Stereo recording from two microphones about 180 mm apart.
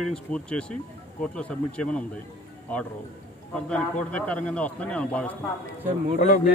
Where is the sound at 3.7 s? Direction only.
5° left (ahead or behind).